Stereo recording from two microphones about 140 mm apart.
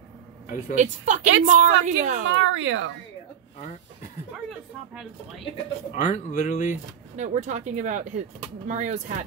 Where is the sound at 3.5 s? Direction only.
70° left (ahead or behind).